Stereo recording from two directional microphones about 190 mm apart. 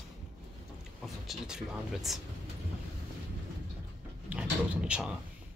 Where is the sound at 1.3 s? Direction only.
5° right (ahead or behind).